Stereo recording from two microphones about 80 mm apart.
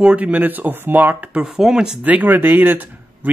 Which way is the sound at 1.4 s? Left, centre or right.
Centre.